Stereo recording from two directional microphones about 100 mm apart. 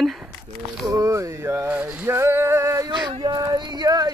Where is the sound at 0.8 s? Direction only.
35° right (ahead or behind).